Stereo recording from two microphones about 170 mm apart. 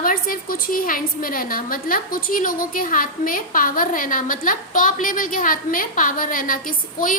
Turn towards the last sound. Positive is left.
turn(degrees=50)  # may be behind; listen again after turning